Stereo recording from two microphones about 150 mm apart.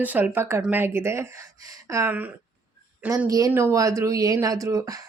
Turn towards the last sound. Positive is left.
turn(degrees=-25)  # may be behind; listen again after turning